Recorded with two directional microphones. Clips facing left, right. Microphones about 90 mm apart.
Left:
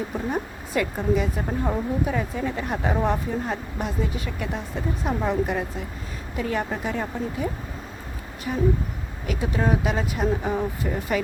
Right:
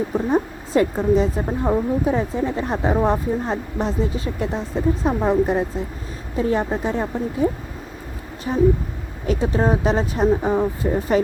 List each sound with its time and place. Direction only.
0.1 s speech: 25° right (ahead or behind)